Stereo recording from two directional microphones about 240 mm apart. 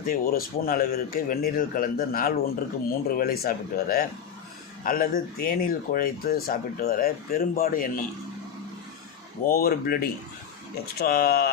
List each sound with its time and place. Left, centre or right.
0.0 s speech: left
9.4 s speech: left